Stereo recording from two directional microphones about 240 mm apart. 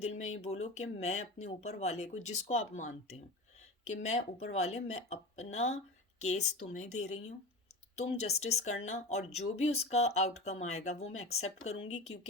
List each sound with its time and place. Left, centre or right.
0.0 s speech: left